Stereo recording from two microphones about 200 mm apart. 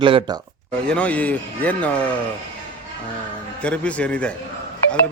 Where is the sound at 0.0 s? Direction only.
25° right (ahead or behind).